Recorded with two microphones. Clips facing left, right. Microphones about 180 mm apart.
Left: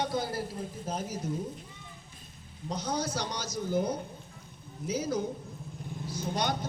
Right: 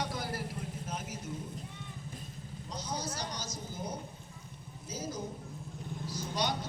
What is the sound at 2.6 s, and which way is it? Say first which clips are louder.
Speech: left 7 dB; 60° left (ahead or behind).